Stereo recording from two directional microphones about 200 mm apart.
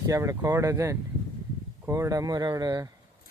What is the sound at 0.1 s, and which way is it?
Speech, 15° right (ahead or behind).